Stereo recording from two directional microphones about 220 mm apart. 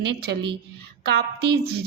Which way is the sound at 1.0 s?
50° right (ahead or behind).